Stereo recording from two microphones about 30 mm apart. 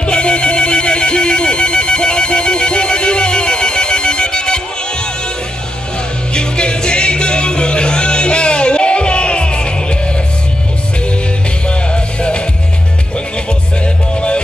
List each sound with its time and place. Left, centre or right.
0.0 s telephone: left
6.3 s music: left
11.9 s music: left